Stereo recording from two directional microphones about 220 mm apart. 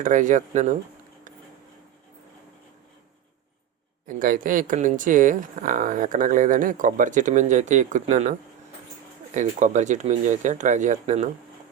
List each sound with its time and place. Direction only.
0.0 s speech: 35° right (ahead or behind)
4.0 s speech: 40° right (ahead or behind)